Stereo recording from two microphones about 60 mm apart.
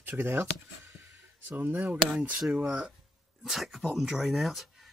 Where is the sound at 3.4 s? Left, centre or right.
Centre.